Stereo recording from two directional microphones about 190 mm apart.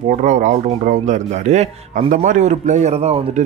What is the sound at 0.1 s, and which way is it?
Speech, 40° right (ahead or behind).